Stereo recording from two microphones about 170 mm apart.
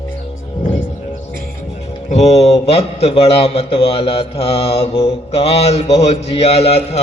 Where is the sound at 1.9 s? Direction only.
40° left (ahead or behind).